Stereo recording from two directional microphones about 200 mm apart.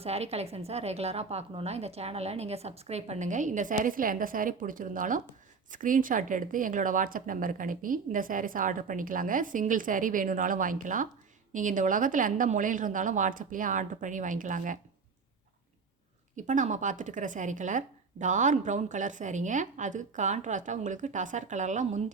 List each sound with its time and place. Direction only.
0.0 s speech: 30° right (ahead or behind)
16.3 s speech: 40° right (ahead or behind)